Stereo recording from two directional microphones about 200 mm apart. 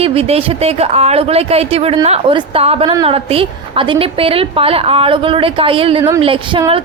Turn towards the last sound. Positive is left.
turn(degrees=-25)  # may be behind; listen again after turning